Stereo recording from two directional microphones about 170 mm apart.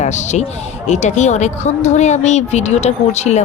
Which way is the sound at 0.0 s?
45° left (ahead or behind).